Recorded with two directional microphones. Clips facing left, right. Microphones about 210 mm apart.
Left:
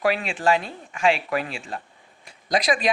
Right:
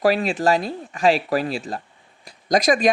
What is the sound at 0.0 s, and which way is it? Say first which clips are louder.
A man's voice: right 4 dB; 35° right (ahead or behind).